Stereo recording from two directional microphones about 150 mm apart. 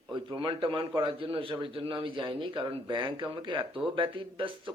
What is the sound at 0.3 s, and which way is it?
A man's voice, 35° right (ahead or behind).